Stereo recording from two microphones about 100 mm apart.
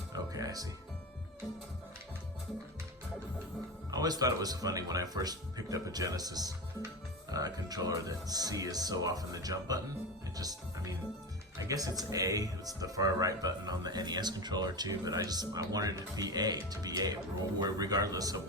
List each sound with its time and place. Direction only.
0.1 s music: 40° right (ahead or behind)
3.9 s speech: 40° right (ahead or behind)